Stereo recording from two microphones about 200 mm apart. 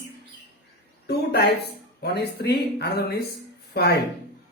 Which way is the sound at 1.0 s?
55° left (ahead or behind).